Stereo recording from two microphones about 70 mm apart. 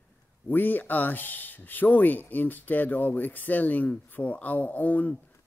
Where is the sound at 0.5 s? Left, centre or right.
Left.